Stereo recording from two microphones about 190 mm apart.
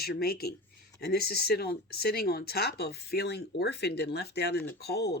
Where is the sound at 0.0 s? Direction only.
55° left (ahead or behind).